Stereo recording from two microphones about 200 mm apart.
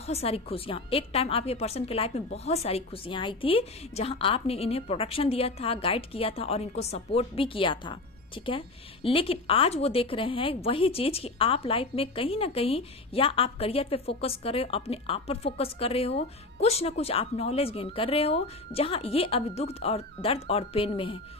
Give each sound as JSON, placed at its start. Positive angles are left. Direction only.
{"t": 0.0, "sound": "a woman's voice", "side_deg": 30}